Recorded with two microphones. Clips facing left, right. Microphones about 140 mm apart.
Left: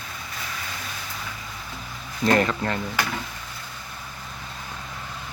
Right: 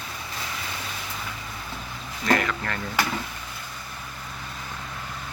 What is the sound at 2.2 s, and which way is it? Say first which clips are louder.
Speech: left 3 dB; 30° left (ahead or behind).